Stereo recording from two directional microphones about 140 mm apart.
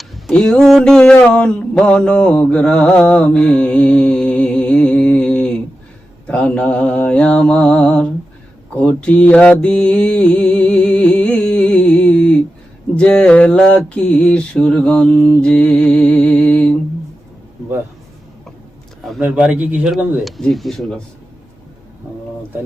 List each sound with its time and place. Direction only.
0.3 s a sound: 5° left (ahead or behind)
6.2 s mantra: 10° left (ahead or behind)
19.2 s a man's voice: 10° right (ahead or behind)